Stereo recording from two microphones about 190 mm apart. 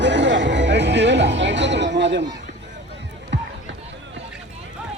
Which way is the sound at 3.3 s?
70° right (ahead or behind).